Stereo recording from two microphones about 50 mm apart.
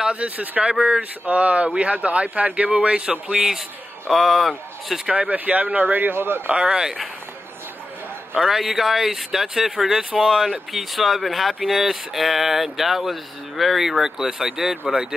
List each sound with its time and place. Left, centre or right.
0.0 s speech: right
3.3 s speech: centre
5.1 s speech: right
6.5 s speech: right
6.8 s speech: centre
8.4 s speech: centre
10.5 s speech: centre